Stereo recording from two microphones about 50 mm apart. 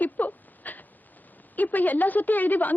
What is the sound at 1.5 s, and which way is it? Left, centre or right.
A woman's voice, left.